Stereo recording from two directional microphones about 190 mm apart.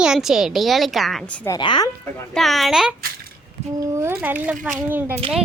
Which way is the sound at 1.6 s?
25° left (ahead or behind).